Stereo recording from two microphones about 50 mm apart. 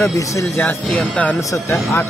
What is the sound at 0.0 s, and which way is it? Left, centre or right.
Speech, left.